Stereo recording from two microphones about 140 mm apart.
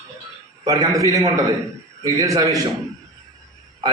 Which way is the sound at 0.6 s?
25° right (ahead or behind).